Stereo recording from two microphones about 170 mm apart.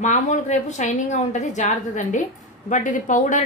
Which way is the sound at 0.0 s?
45° left (ahead or behind).